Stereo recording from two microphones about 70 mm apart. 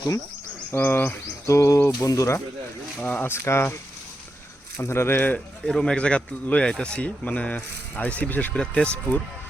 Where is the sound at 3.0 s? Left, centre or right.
Left.